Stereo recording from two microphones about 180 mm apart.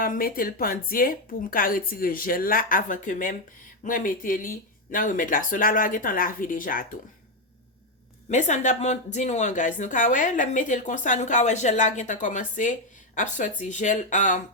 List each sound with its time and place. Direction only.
0.0 s speech: 50° left (ahead or behind)
8.3 s speech: 40° left (ahead or behind)